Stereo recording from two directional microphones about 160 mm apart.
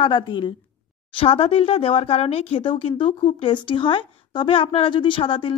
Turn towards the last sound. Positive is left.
turn(degrees=35)  # may be behind; listen again after turning